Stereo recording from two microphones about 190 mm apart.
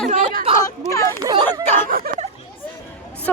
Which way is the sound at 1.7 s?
45° right (ahead or behind).